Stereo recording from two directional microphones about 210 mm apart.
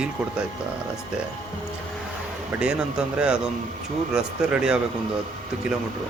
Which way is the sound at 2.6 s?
5° right (ahead or behind).